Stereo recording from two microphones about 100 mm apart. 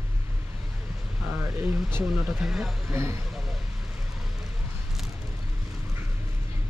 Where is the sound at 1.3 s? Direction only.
25° right (ahead or behind).